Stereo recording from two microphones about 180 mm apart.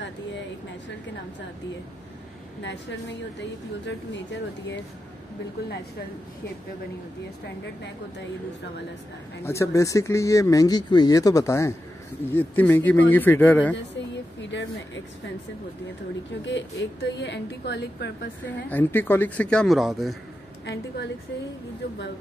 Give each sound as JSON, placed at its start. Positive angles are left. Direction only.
{"t": 2.6, "sound": "a woman's voice", "side_deg": 75}
{"t": 9.4, "sound": "speech", "side_deg": 15}
{"t": 14.4, "sound": "speech", "side_deg": 85}
{"t": 16.4, "sound": "a woman's voice", "side_deg": 85}
{"t": 18.7, "sound": "speech", "side_deg": 10}
{"t": 20.6, "sound": "a woman's voice", "side_deg": 75}